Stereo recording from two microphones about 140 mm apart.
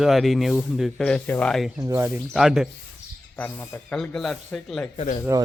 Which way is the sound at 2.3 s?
5° right (ahead or behind).